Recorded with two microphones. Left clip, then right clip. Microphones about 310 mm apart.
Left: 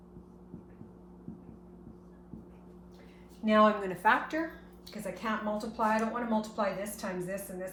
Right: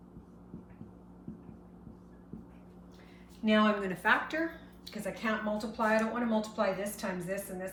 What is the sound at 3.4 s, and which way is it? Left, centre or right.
A woman's voice, centre.